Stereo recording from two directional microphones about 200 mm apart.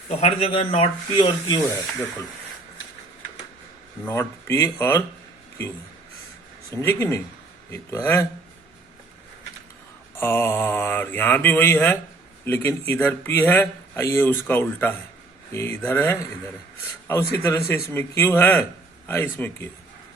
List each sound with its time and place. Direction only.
0.1 s speech: 30° left (ahead or behind)
4.0 s speech: 15° left (ahead or behind)
6.8 s speech: 15° left (ahead or behind)
10.2 s speech: 10° left (ahead or behind)